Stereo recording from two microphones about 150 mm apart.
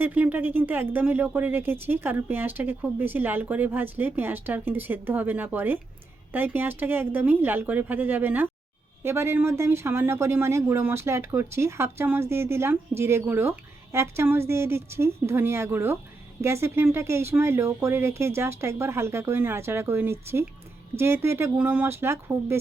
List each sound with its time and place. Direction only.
0.0 s speech: 10° right (ahead or behind)